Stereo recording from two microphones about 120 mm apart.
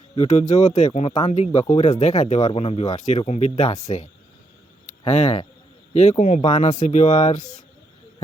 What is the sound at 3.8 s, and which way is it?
Speech, 90° left.